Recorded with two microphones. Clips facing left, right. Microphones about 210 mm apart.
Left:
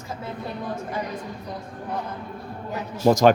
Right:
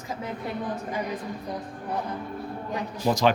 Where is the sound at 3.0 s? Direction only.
45° left (ahead or behind).